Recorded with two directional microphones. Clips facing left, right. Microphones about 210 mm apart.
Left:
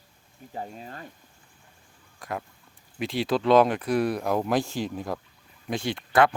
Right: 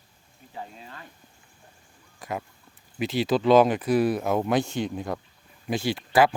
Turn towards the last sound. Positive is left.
turn(degrees=-5)  # may be behind; listen again after turning